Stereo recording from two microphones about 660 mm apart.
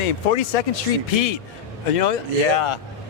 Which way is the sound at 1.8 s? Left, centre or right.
Left.